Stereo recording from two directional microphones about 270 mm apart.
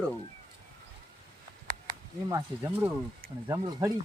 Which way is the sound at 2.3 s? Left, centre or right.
Centre.